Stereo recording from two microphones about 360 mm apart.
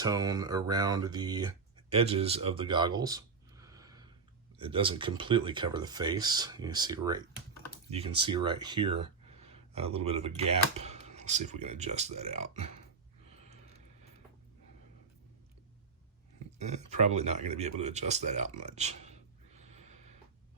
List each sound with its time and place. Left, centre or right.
0.0 s speech: centre
13.5 s a sound: centre
16.6 s speech: centre